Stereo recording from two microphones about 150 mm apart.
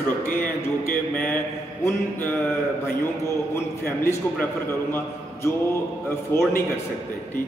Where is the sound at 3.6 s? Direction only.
15° left (ahead or behind).